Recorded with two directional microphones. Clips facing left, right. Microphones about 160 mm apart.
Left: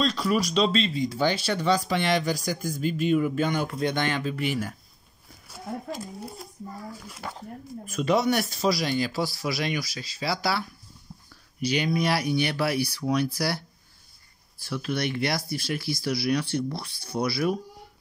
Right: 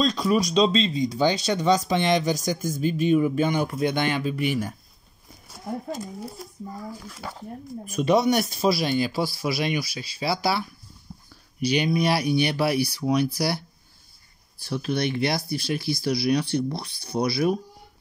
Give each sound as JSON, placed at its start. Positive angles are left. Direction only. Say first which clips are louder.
{"t": 0.0, "sound": "speech", "louder": "right 3 dB", "side_deg": -15}
{"t": 7.8, "sound": "speech", "louder": "right 3 dB", "side_deg": -20}
{"t": 11.1, "sound": "a sound", "louder": "right 3 dB", "side_deg": -5}
{"t": 11.6, "sound": "speech", "louder": "right 3 dB", "side_deg": -20}
{"t": 14.6, "sound": "speech", "louder": "right 3 dB", "side_deg": -20}